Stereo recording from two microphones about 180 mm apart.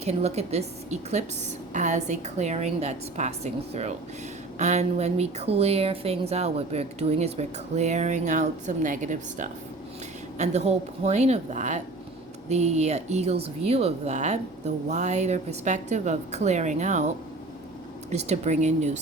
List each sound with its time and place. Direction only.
0.0 s a woman's voice: 35° right (ahead or behind)